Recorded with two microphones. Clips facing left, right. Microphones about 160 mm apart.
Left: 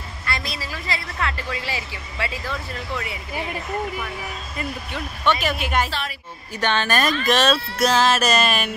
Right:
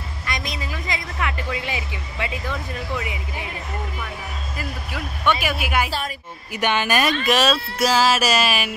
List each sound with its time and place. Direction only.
0.3 s a woman's voice: 15° right (ahead or behind)
4.6 s speech: 10° right (ahead or behind)
7.5 s music: 5° right (ahead or behind)